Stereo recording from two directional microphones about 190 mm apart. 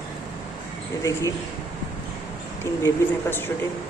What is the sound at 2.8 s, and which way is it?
Speech, 10° left (ahead or behind).